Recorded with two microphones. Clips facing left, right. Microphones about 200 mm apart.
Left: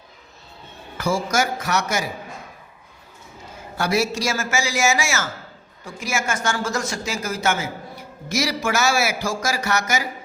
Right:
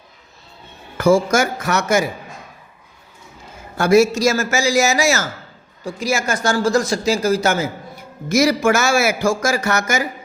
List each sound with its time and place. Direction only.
0.9 s speech: 55° right (ahead or behind)
3.8 s speech: 50° right (ahead or behind)